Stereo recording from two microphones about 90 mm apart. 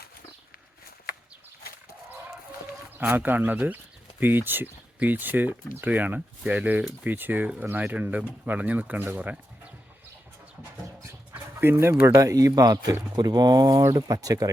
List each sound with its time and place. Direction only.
3.0 s speech: 20° right (ahead or behind)
11.6 s speech: 30° right (ahead or behind)